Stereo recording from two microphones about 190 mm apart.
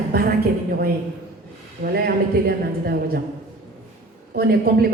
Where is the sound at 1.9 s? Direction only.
55° right (ahead or behind).